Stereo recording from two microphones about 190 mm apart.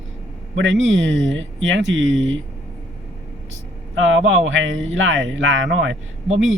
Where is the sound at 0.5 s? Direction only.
90° right.